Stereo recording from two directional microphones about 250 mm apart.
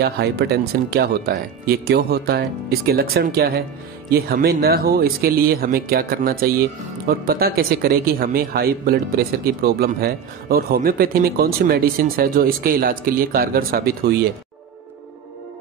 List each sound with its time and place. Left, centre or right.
0.0 s speech: right